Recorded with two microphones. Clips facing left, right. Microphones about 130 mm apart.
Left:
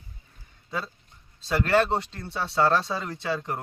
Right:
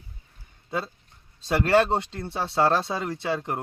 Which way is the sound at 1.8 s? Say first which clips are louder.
Right 2 dB; 40° right (ahead or behind).